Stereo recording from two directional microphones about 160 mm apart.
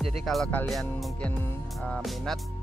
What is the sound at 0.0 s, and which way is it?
Speech, centre (ahead or behind).